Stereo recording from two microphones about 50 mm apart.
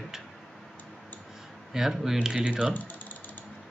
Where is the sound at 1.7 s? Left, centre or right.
Centre.